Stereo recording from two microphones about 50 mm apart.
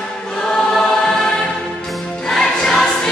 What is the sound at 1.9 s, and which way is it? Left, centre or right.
Music, centre.